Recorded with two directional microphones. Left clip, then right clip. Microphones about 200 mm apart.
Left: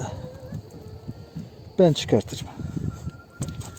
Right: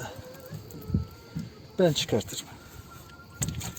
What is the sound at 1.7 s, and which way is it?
Speech, 50° left (ahead or behind).